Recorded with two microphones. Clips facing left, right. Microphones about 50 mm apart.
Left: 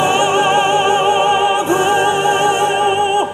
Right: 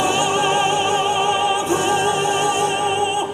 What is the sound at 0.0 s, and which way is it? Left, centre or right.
Opera, left.